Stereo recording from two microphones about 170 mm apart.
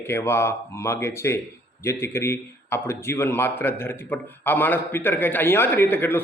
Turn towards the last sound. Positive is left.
turn(degrees=10)  # may be behind; listen again after turning